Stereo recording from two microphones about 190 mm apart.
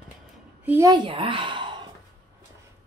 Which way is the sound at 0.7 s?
15° right (ahead or behind).